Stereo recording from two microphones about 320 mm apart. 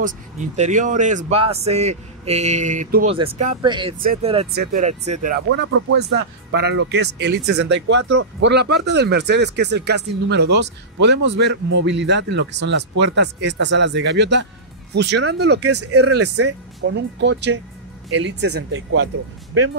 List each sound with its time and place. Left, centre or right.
0.0 s speech: right
15.7 s speech: right
16.0 s speech: right